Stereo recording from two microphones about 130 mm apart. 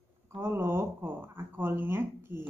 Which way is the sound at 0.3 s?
20° right (ahead or behind).